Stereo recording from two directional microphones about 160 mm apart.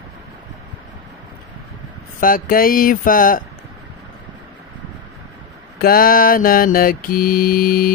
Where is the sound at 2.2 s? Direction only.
60° left (ahead or behind).